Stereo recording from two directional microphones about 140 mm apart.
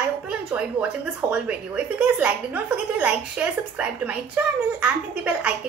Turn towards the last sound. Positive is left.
turn(degrees=-10)  # may be behind; listen again after turning